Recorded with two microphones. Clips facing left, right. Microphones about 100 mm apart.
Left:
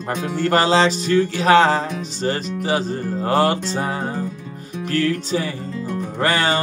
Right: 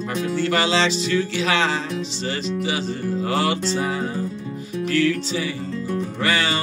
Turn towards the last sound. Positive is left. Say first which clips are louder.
# left 3 dB
turn(degrees=40)  # may be behind; listen again after turning